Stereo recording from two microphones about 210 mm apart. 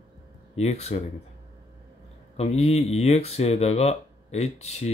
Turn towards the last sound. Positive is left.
turn(degrees=30)  # may be behind; listen again after turning